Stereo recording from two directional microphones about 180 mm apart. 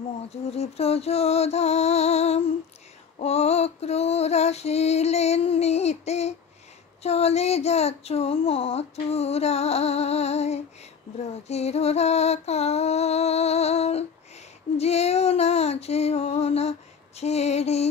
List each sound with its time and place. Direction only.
0.5 s speech: 35° left (ahead or behind)